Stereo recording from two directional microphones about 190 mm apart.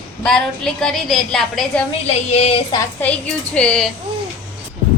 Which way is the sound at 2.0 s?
30° left (ahead or behind).